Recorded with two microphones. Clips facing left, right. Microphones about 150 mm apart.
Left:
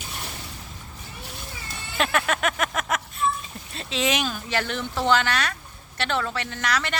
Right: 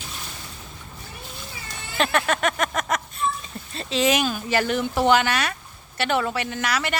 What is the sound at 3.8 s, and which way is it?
Speech, centre (ahead or behind).